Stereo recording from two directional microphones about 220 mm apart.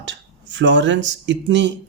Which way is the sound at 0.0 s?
55° right (ahead or behind).